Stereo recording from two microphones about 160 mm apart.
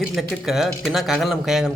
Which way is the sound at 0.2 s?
Centre (ahead or behind).